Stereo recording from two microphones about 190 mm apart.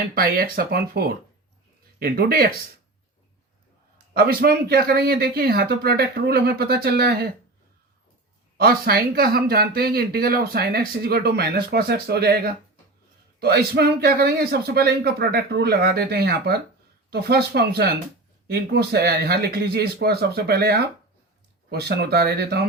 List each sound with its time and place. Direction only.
0.1 s speech: 50° right (ahead or behind)
4.1 s speech: 55° right (ahead or behind)
8.5 s speech: 55° right (ahead or behind)